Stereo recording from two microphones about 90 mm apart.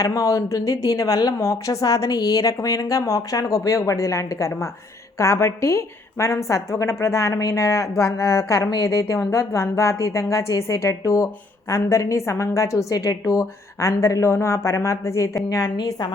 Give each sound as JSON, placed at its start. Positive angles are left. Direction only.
{"t": 0.0, "sound": "a woman's voice", "side_deg": 40}